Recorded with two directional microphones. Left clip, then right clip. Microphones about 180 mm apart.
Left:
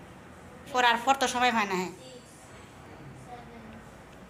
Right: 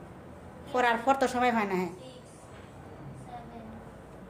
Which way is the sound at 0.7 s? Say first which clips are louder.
Left 2 dB; 25° right (ahead or behind).